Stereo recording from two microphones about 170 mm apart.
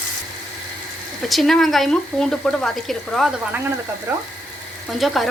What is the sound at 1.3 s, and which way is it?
Speech, centre (ahead or behind).